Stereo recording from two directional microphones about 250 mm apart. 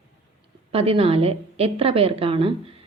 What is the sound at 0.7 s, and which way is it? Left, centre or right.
A woman's voice, right.